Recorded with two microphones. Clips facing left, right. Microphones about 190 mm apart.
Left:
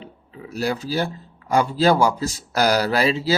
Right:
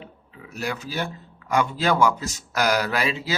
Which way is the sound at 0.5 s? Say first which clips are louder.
Left 6 dB; 35° left (ahead or behind).